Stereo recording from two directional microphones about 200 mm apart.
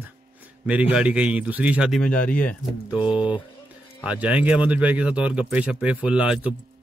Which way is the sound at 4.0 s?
5° right (ahead or behind).